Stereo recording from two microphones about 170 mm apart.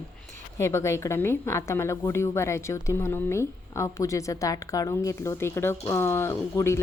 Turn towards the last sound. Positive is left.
turn(degrees=15)  # may be behind; listen again after turning